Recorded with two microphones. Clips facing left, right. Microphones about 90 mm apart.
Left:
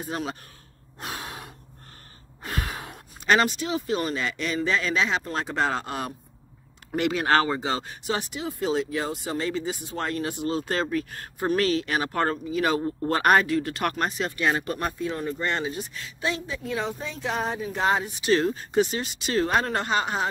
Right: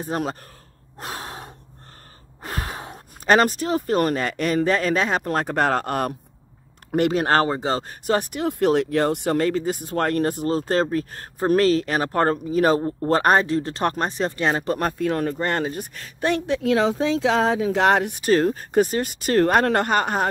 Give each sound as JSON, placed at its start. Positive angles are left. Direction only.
{"t": 0.0, "sound": "speech", "side_deg": -40}
{"t": 0.9, "sound": "gasp", "side_deg": -40}
{"t": 2.4, "sound": "speech", "side_deg": -35}
{"t": 7.0, "sound": "speech", "side_deg": -40}
{"t": 12.8, "sound": "speech", "side_deg": -30}
{"t": 14.8, "sound": "speech", "side_deg": -55}
{"t": 15.3, "sound": "speech", "side_deg": -50}
{"t": 18.2, "sound": "speech", "side_deg": -45}